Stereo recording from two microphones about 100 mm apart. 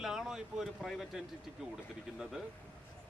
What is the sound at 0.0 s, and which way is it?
A man's voice, 5° right (ahead or behind).